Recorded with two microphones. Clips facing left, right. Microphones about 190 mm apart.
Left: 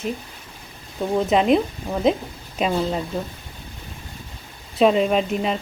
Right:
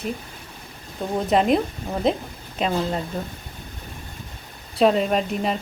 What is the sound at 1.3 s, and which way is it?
Speech, centre (ahead or behind).